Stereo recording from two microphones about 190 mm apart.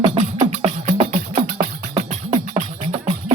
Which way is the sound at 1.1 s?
50° right (ahead or behind).